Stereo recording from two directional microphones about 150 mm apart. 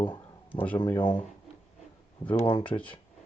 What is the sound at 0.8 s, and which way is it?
Speech, 35° left (ahead or behind).